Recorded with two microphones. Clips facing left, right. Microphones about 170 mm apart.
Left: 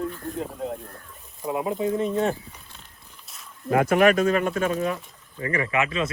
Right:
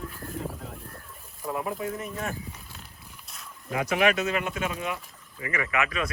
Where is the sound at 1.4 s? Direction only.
20° left (ahead or behind).